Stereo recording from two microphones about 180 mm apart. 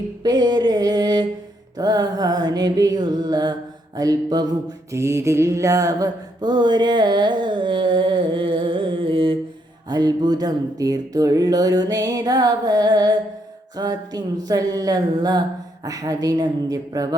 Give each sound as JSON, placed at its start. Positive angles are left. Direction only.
{"t": 0.2, "sound": "mantra", "side_deg": -25}